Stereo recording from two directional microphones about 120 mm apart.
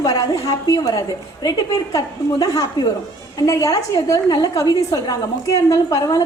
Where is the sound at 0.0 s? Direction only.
30° left (ahead or behind).